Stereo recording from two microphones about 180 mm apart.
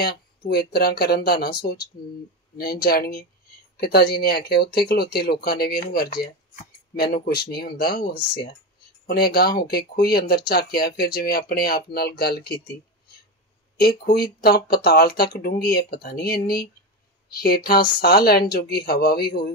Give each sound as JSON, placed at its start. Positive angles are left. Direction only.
{"t": 0.0, "sound": "speech", "side_deg": 60}
{"t": 7.2, "sound": "speech", "side_deg": 60}
{"t": 13.7, "sound": "speech", "side_deg": 60}